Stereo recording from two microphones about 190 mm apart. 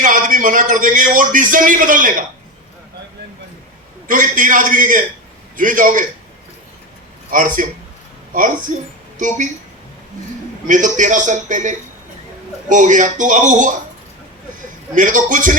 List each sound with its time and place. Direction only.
0.0 s a man's voice: 45° right (ahead or behind)
4.1 s a man's voice: 45° right (ahead or behind)
7.3 s a man's voice: 45° right (ahead or behind)
10.7 s a man's voice: 40° right (ahead or behind)
14.9 s a man's voice: 45° right (ahead or behind)